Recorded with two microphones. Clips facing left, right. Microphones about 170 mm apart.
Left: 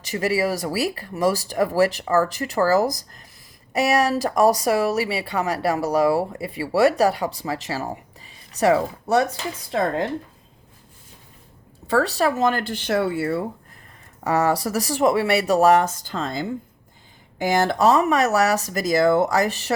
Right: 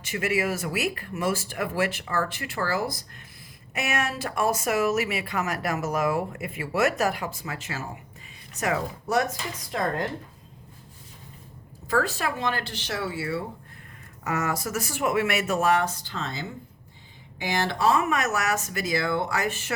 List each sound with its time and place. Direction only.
0.0 s speech: 35° left (ahead or behind)
11.9 s speech: 35° left (ahead or behind); by 13.4 s 55° left (ahead or behind)
14.3 s speech: 35° left (ahead or behind)